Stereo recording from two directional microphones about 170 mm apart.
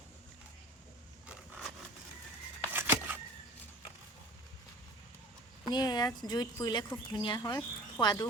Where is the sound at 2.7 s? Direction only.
15° right (ahead or behind).